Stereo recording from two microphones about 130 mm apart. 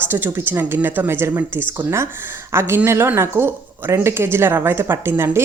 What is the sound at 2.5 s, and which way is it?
Speech, 20° right (ahead or behind).